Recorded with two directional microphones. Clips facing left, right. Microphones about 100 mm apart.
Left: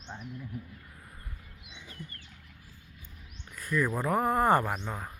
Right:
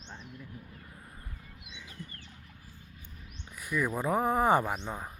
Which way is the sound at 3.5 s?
15° right (ahead or behind).